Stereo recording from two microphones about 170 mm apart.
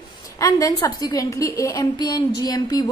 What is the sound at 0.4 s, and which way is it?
A woman's voice, 20° left (ahead or behind).